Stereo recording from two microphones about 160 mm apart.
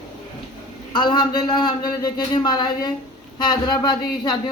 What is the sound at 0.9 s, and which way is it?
Speech, 25° left (ahead or behind).